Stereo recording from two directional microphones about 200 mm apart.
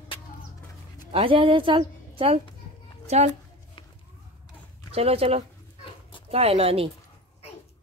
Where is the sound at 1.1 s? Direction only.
25° right (ahead or behind).